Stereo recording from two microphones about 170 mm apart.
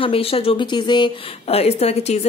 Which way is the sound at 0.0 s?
35° left (ahead or behind).